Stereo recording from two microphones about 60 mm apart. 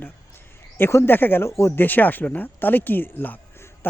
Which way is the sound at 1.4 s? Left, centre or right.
Left.